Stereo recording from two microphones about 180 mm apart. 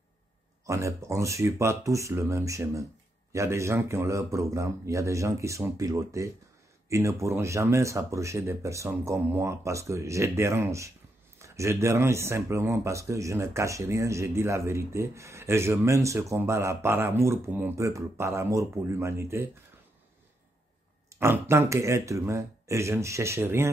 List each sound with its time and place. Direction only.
0.7 s speech: 15° right (ahead or behind)
21.1 s speech: 15° right (ahead or behind)